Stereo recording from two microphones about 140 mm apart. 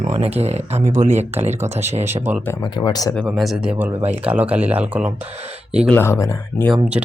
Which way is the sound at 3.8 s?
15° right (ahead or behind).